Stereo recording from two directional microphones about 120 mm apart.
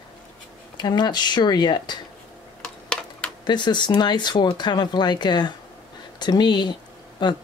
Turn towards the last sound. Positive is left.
turn(degrees=35)  # may be behind; listen again after turning